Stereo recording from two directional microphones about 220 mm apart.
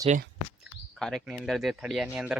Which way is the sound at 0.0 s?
30° right (ahead or behind).